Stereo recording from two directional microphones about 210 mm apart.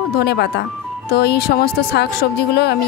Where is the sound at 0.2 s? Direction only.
50° left (ahead or behind).